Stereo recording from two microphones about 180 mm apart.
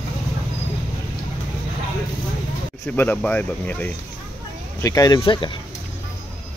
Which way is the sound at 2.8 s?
10° left (ahead or behind).